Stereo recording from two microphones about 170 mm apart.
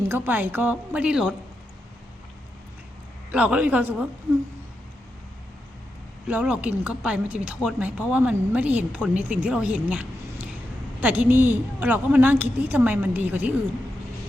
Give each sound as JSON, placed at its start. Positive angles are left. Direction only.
{"t": 0.1, "sound": "a woman's voice", "side_deg": -10}
{"t": 3.3, "sound": "a woman's voice", "side_deg": -10}
{"t": 6.2, "sound": "a woman's voice", "side_deg": -5}